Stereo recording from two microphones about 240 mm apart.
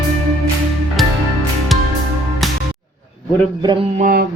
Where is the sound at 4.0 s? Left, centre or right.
Right.